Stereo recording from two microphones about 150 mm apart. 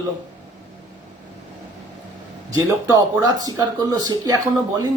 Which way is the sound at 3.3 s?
25° right (ahead or behind).